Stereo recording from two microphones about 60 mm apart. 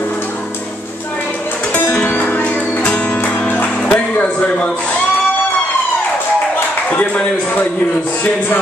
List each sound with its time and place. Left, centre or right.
1.8 s music: left
3.9 s speech: left
6.9 s speech: left